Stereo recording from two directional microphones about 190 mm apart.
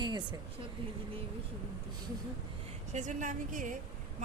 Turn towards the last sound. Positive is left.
turn(degrees=-45)  # may be behind; listen again after turning